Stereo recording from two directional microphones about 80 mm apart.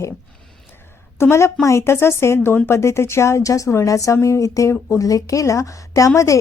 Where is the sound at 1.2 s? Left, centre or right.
Left.